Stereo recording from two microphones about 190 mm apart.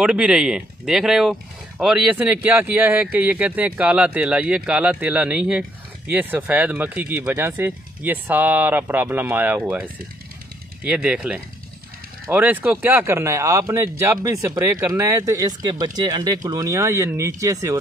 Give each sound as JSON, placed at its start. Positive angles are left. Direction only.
{"t": 0.0, "sound": "speech", "side_deg": -5}